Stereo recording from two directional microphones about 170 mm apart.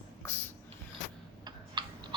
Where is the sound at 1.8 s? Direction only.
25° right (ahead or behind).